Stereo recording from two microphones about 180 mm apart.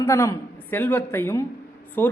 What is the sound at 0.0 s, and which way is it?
Speech, 15° left (ahead or behind).